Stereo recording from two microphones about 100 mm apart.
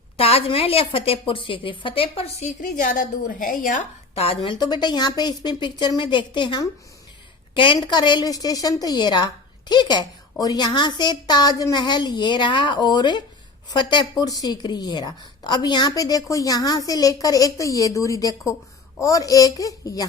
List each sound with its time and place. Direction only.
0.2 s a woman's voice: 70° left (ahead or behind)
4.1 s speech: 80° left
4.5 s a woman's voice: 45° left (ahead or behind)